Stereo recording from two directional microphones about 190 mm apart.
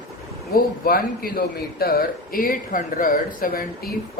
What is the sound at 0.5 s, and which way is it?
A man's voice, 50° left (ahead or behind).